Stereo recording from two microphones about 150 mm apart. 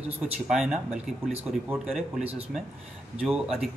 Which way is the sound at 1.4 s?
10° right (ahead or behind).